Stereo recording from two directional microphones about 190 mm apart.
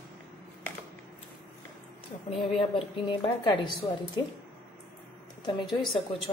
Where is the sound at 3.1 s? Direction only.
25° left (ahead or behind).